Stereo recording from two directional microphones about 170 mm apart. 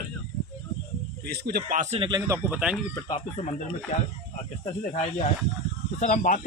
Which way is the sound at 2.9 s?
25° left (ahead or behind).